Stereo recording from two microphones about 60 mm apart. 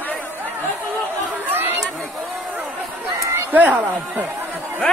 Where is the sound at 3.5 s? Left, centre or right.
Right.